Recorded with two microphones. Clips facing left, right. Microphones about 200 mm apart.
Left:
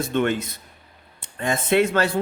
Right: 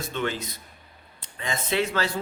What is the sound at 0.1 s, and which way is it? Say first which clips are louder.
Speech: left 6 dB; 55° left (ahead or behind).